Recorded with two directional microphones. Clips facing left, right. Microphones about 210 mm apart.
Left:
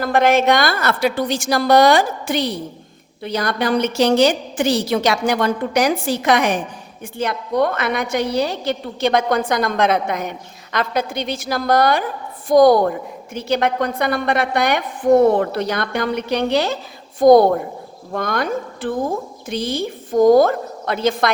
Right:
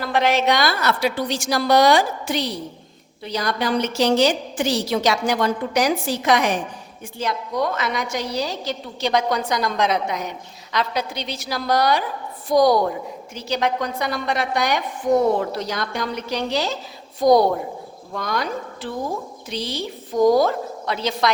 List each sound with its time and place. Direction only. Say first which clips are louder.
0.0 s a woman's voice: left 4 dB; 50° left (ahead or behind)